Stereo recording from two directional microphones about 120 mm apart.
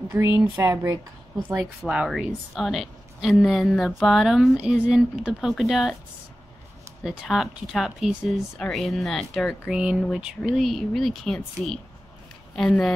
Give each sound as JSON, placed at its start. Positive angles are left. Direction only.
{"t": 0.2, "sound": "speech", "side_deg": -25}
{"t": 1.9, "sound": "speech", "side_deg": -5}
{"t": 7.0, "sound": "speech", "side_deg": 0}